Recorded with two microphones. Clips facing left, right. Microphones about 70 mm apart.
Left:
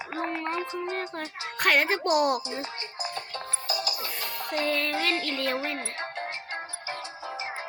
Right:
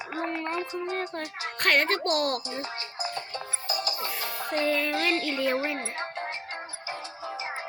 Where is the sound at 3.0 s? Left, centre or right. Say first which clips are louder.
Right 1 dB; right.